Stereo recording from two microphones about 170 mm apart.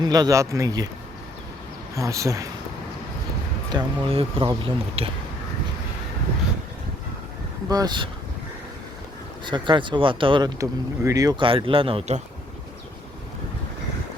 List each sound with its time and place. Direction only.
0.0 s speech: 25° right (ahead or behind)
2.0 s speech: 20° right (ahead or behind)
3.7 s speech: 30° right (ahead or behind)
7.7 s speech: 25° right (ahead or behind)
9.4 s speech: 25° right (ahead or behind)